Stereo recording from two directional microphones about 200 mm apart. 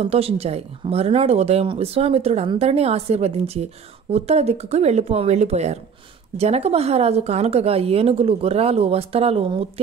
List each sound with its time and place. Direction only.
0.0 s speech: 30° right (ahead or behind)